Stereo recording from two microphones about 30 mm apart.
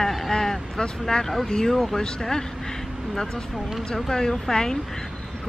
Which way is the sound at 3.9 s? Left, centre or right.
Centre.